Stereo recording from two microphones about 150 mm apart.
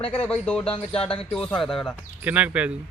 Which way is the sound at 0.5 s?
35° left (ahead or behind).